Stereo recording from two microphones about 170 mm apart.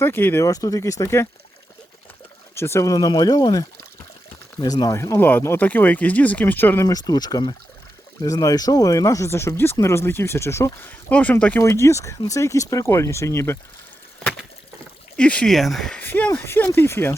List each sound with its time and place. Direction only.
0.0 s speech: 10° left (ahead or behind)
2.6 s speech: 15° left (ahead or behind)
15.1 s speech: 5° left (ahead or behind)